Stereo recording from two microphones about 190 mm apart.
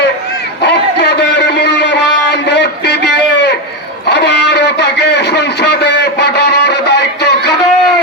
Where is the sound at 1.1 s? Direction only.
65° left (ahead or behind).